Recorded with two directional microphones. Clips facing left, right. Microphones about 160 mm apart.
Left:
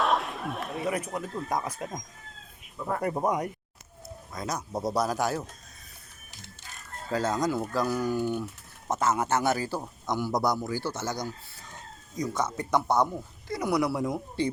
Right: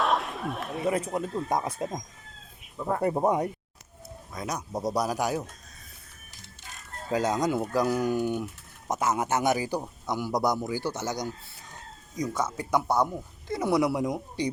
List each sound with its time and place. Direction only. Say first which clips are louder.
0.0 s a sound: even; centre (ahead or behind)
0.9 s speech: right 5 dB; 25° right (ahead or behind)
2.7 s speech: right 2 dB; 15° right (ahead or behind)
3.0 s speech: right 3 dB; 25° right (ahead or behind)
4.3 s speech: even; 15° right (ahead or behind)
7.1 s speech: right 1 dB; 15° right (ahead or behind)
13.5 s speech: right 2 dB; 25° right (ahead or behind)